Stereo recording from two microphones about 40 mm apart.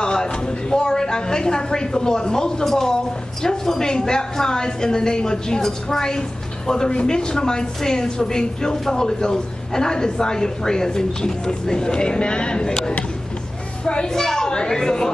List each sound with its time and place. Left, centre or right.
0.0 s a woman's voice: centre
14.1 s speech: centre